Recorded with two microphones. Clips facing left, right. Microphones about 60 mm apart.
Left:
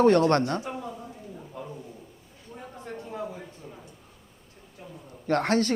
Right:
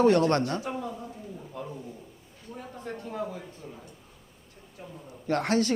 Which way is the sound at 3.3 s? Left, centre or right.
Centre.